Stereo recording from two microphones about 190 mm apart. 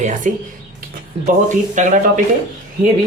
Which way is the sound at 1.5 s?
40° right (ahead or behind).